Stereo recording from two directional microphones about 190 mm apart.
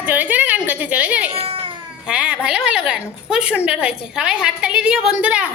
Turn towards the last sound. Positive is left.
turn(degrees=-5)  # may be behind; listen again after turning